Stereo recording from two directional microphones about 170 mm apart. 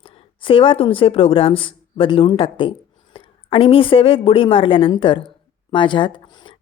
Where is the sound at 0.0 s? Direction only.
30° left (ahead or behind).